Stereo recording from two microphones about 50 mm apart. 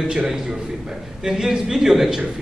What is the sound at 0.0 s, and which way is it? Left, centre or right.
A man's voice, centre.